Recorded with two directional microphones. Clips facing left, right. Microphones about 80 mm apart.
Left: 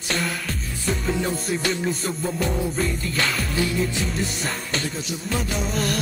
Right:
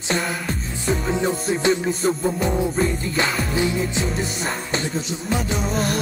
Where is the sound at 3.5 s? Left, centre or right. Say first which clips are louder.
Right 1 dB; right.